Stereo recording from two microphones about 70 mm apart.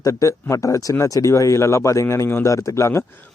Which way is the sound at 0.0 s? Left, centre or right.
Left.